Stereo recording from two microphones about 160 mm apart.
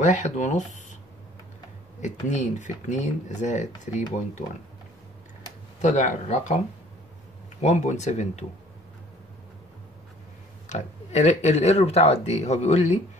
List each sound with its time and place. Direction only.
0.0 s speech: 50° left (ahead or behind)
2.0 s speech: 50° left (ahead or behind)
5.8 s speech: 50° left (ahead or behind)
7.6 s speech: 45° left (ahead or behind)
10.7 s speech: 45° left (ahead or behind)